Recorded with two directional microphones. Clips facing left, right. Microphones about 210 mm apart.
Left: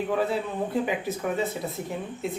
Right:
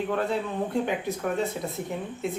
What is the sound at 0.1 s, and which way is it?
Speech, centre (ahead or behind).